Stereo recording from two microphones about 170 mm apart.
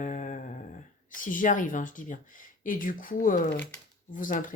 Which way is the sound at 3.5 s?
10° left (ahead or behind).